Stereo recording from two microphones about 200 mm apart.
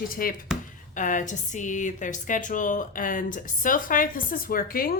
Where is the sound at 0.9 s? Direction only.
40° left (ahead or behind).